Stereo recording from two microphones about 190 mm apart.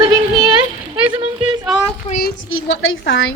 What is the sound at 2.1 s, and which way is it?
Speech, 50° left (ahead or behind).